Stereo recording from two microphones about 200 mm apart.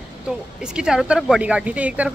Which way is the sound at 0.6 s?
5° right (ahead or behind).